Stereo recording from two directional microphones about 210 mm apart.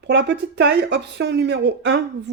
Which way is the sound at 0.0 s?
55° right (ahead or behind).